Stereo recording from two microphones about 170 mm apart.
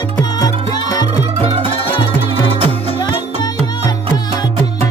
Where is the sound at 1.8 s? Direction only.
30° left (ahead or behind).